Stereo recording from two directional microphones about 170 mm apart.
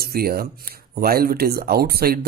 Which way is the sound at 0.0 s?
65° right (ahead or behind).